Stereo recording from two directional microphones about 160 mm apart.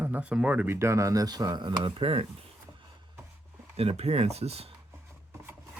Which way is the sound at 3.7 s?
40° right (ahead or behind).